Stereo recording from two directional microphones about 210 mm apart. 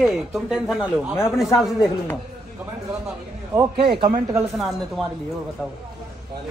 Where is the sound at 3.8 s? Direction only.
45° right (ahead or behind).